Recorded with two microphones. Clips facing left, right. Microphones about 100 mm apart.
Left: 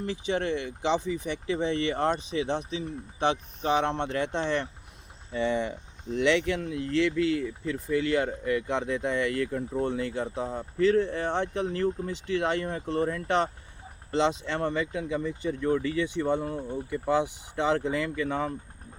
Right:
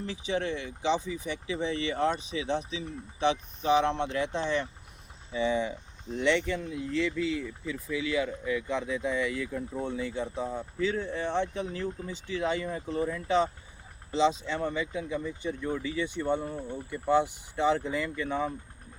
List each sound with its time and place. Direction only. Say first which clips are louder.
0.0 s speech: left 2 dB; 55° left (ahead or behind)
6.1 s speech: left 2 dB; 75° left (ahead or behind)